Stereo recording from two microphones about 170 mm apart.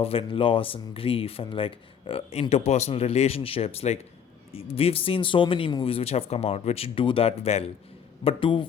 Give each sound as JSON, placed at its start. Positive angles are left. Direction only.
{"t": 0.0, "sound": "speech", "side_deg": 35}